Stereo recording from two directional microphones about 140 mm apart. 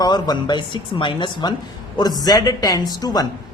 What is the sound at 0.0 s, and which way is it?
A man's voice, 30° left (ahead or behind).